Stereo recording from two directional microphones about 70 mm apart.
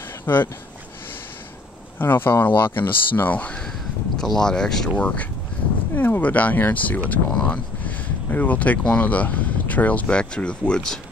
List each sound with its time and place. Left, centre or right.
0.2 s speech: left
2.0 s speech: left
4.2 s speech: centre
5.9 s speech: left; by 11.0 s centre